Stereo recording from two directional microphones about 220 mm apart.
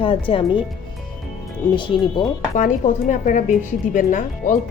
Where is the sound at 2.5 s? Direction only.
35° left (ahead or behind).